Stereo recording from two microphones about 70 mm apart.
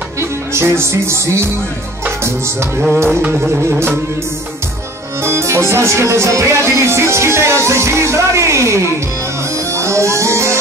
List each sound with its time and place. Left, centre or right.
0.2 s music: right
3.1 s carnatic music: right
3.3 s music: right
5.2 s music: right